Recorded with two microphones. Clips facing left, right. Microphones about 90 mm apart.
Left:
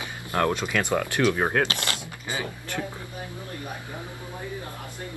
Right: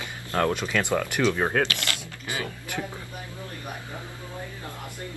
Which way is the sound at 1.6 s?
25° left (ahead or behind).